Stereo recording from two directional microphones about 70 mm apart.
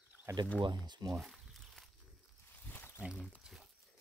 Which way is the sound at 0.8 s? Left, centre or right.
Right.